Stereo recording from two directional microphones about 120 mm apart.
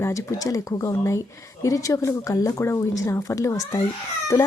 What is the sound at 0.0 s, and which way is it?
Speech, 25° left (ahead or behind).